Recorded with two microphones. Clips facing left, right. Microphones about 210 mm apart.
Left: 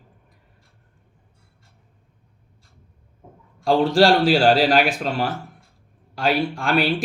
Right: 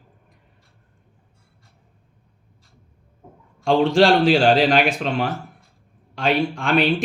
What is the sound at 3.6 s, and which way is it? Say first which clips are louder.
Speech: right 1 dB; 40° left (ahead or behind).